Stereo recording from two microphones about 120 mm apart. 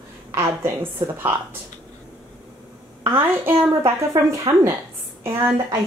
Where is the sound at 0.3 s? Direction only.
20° right (ahead or behind).